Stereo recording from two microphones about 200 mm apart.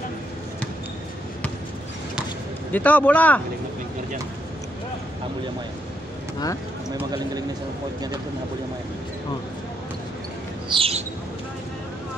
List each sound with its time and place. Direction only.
2.7 s speech: 10° left (ahead or behind)
10.7 s bird: 30° right (ahead or behind)